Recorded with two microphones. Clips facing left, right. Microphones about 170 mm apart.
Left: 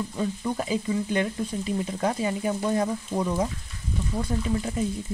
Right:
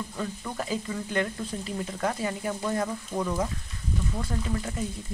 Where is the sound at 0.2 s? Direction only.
20° left (ahead or behind).